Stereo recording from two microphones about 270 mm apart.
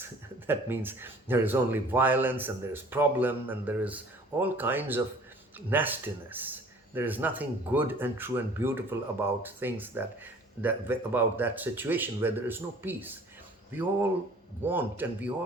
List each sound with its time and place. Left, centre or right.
0.0 s speech: centre
14.6 s speech: centre